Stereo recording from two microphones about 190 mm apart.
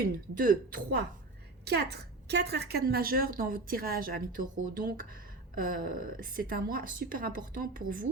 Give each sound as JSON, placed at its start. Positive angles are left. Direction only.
{"t": 0.0, "sound": "a woman's voice", "side_deg": -45}
{"t": 1.6, "sound": "a woman's voice", "side_deg": -60}